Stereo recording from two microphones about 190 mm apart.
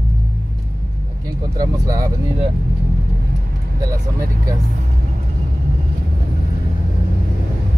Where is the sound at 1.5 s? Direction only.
20° right (ahead or behind).